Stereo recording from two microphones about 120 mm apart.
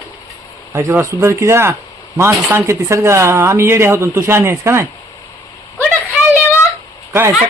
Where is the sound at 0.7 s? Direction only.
25° right (ahead or behind).